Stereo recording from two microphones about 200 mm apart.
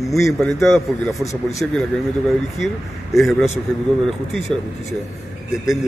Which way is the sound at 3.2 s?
Centre (ahead or behind).